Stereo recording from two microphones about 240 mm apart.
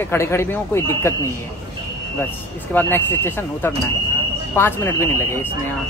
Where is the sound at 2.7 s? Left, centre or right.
Centre.